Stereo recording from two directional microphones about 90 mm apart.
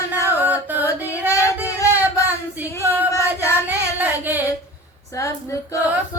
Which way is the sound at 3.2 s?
20° right (ahead or behind).